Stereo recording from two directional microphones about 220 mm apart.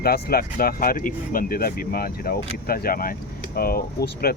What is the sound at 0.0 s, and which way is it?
Speech, 45° left (ahead or behind).